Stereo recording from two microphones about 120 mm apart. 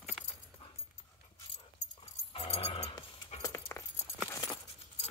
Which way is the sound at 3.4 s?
20° left (ahead or behind).